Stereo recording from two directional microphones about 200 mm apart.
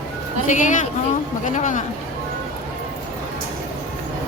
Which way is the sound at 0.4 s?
40° left (ahead or behind).